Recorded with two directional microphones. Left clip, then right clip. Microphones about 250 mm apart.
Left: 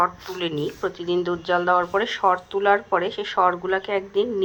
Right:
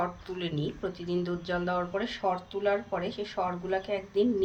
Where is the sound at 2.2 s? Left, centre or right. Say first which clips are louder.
Left 10 dB; left.